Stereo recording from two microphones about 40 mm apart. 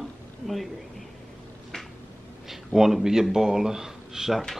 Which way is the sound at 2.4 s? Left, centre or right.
Centre.